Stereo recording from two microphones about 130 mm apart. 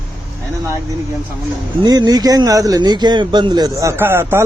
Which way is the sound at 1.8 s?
30° right (ahead or behind).